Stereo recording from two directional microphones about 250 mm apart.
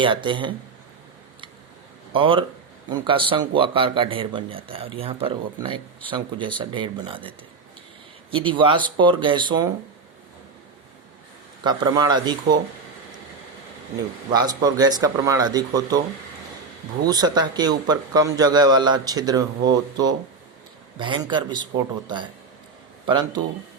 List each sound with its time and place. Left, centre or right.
0.0 s speech: centre
2.1 s speech: centre
11.6 s a man's voice: centre
14.3 s a man's voice: centre
17.1 s a man's voice: centre